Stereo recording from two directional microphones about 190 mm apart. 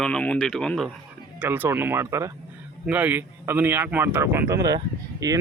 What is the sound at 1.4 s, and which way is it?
Speech, 10° right (ahead or behind).